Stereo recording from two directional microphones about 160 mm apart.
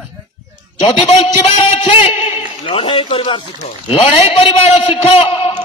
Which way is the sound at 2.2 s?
30° left (ahead or behind).